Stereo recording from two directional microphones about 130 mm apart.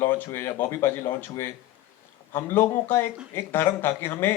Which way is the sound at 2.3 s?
15° left (ahead or behind).